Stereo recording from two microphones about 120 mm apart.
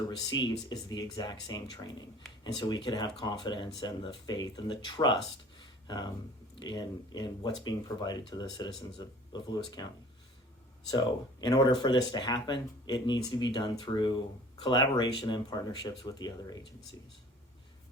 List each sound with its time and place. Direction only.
0.3 s speech: 40° left (ahead or behind)
5.5 s a sound: 40° left (ahead or behind)
6.6 s speech: 40° left (ahead or behind)
10.9 s speech: 35° left (ahead or behind)